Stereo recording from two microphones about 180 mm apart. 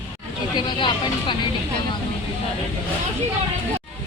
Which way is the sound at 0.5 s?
25° left (ahead or behind).